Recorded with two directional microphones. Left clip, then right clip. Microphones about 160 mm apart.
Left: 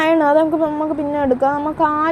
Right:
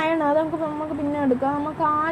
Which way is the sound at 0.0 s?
50° left (ahead or behind).